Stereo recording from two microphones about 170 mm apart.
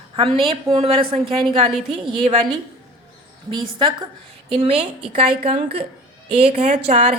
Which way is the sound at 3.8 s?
30° right (ahead or behind).